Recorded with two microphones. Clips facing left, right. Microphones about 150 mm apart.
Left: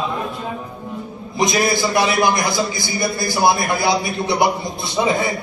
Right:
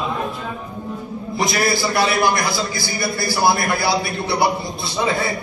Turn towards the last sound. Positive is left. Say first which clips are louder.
# left 2 dB
turn(degrees=20)  # may be behind; listen again after turning